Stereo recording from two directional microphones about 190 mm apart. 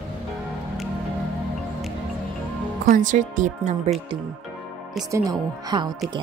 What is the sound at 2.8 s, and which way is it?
Speech, 45° right (ahead or behind).